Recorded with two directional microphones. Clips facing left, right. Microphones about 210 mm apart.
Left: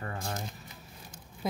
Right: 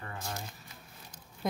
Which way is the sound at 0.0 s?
45° left (ahead or behind).